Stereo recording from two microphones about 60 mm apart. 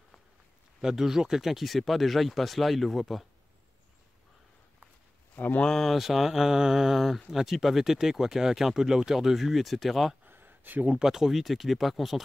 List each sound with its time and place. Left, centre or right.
0.7 s speech: centre
5.3 s speech: left
5.6 s speech: centre
10.2 s a sound: right
11.0 s speech: centre